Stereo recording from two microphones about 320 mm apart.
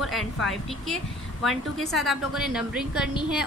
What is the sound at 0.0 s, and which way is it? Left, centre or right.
A woman's voice, centre.